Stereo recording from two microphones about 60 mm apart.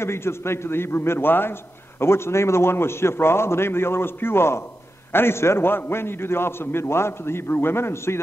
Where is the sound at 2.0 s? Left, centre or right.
Left.